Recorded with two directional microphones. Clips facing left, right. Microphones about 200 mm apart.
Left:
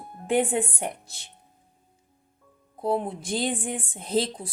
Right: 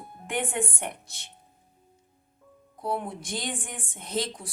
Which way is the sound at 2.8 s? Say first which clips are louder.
Left 5 dB; 30° left (ahead or behind).